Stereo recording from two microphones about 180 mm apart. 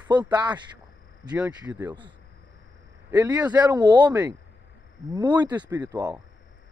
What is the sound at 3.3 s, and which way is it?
Speech, 20° right (ahead or behind).